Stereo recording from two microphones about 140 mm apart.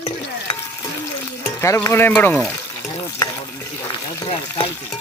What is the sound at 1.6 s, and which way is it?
Speech, 20° left (ahead or behind).